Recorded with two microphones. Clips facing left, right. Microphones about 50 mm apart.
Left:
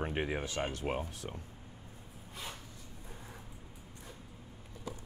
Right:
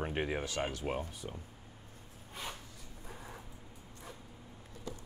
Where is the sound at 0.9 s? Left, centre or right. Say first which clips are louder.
Left 1 dB; centre.